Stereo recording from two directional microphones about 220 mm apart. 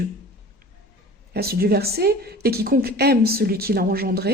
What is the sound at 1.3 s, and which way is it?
A woman's voice, 45° right (ahead or behind).